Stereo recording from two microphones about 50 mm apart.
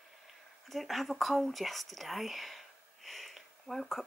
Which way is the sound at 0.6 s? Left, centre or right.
Centre.